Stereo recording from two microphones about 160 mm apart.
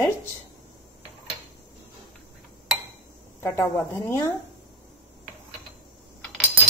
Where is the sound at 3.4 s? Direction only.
15° left (ahead or behind).